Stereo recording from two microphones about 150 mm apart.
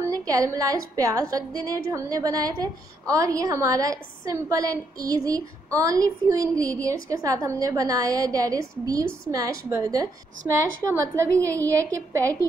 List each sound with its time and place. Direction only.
0.0 s a woman's voice: 20° right (ahead or behind)